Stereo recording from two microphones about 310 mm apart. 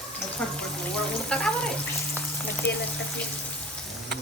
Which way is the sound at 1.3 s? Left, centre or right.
Centre.